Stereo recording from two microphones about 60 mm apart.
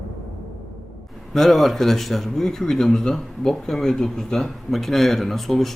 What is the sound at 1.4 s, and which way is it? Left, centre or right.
Speech, centre.